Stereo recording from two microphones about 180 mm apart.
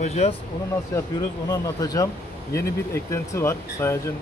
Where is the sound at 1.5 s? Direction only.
20° left (ahead or behind).